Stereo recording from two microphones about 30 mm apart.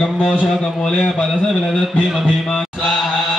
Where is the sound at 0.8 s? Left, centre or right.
Left.